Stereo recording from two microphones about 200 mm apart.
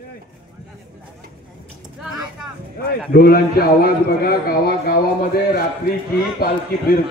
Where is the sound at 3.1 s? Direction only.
50° left (ahead or behind).